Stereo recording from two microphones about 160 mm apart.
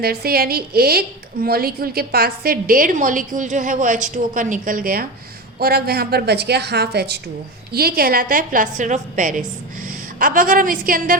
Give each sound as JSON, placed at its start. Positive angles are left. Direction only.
{"t": 0.0, "sound": "a woman's voice", "side_deg": -75}
{"t": 7.7, "sound": "a woman's voice", "side_deg": -75}